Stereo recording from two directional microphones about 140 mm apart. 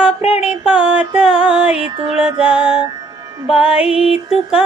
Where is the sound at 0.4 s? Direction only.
5° right (ahead or behind).